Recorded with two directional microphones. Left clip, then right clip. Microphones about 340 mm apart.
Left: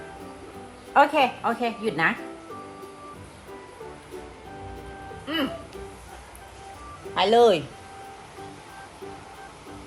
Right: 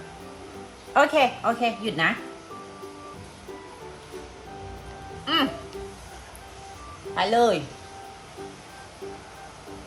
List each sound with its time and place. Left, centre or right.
0.9 s a woman's voice: centre
5.2 s music: centre
7.2 s speech: left